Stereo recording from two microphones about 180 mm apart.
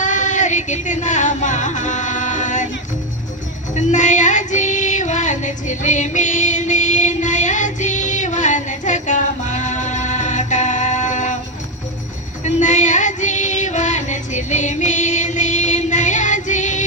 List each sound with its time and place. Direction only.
0.0 s music: 45° left (ahead or behind)
3.7 s female singing: 40° left (ahead or behind)
12.4 s music: 40° left (ahead or behind)